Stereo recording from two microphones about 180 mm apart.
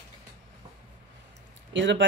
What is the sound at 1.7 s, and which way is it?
Speech, 80° right.